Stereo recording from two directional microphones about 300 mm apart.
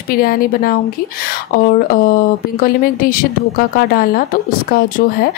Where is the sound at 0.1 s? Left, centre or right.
Left.